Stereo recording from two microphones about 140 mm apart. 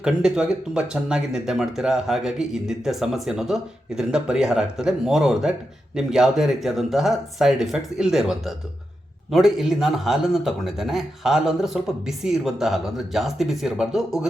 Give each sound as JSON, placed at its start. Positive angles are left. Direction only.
{"t": 0.0, "sound": "speech", "side_deg": -5}